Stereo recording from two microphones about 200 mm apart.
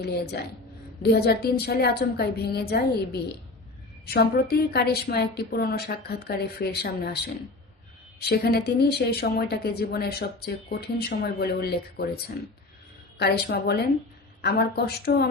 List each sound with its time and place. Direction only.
0.0 s speech: 55° left (ahead or behind)